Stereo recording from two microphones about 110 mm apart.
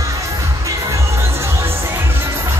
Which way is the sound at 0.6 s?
30° right (ahead or behind).